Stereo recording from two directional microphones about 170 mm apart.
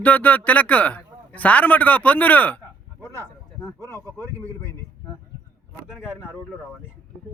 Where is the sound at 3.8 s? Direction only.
20° right (ahead or behind).